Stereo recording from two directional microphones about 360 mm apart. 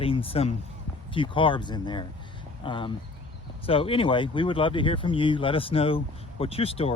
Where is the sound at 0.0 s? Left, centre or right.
Centre.